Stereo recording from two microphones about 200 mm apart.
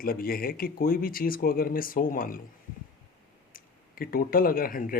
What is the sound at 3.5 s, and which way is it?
Speech, 45° left (ahead or behind).